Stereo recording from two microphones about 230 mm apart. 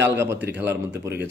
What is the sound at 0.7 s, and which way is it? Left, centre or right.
Speech, right.